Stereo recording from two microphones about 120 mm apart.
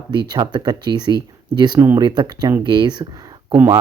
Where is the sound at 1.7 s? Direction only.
20° right (ahead or behind).